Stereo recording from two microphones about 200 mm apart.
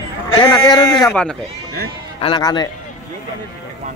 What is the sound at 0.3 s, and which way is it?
Speech, 20° left (ahead or behind).